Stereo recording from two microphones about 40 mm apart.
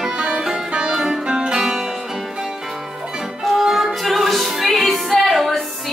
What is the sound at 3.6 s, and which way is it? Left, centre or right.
Music, centre.